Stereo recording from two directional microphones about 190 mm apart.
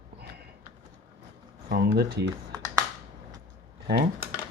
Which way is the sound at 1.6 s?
55° right (ahead or behind).